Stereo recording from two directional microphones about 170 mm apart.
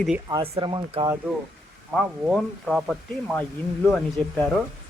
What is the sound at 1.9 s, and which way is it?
Speech, centre (ahead or behind).